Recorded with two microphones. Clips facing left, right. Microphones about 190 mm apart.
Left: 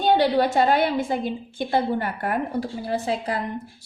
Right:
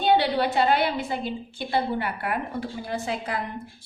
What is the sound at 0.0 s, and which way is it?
A woman's voice, 45° left (ahead or behind).